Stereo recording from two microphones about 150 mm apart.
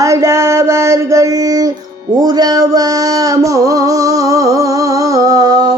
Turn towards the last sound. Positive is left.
turn(degrees=-25)  # may be behind; listen again after turning